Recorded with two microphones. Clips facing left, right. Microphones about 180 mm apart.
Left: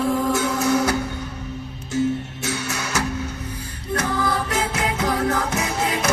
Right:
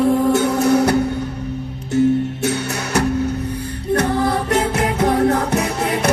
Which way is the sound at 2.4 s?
60° right (ahead or behind).